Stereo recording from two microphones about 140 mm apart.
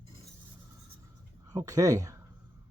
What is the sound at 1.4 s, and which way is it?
Speech, 25° right (ahead or behind).